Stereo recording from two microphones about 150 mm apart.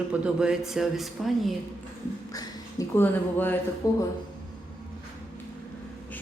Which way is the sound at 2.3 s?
25° left (ahead or behind).